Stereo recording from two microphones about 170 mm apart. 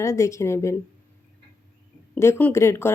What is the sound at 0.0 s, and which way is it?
Speech, 15° left (ahead or behind).